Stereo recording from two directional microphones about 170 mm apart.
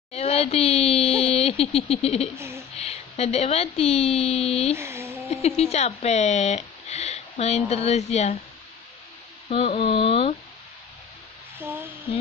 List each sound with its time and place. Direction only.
0.1 s speech: 35° left (ahead or behind)
2.3 s speech: 15° right (ahead or behind)
2.7 s a woman's voice: 35° left (ahead or behind)
4.7 s speech: 15° right (ahead or behind)
5.6 s speech: 40° left (ahead or behind)
9.5 s speech: 35° left (ahead or behind)
11.5 s a sound: 10° right (ahead or behind)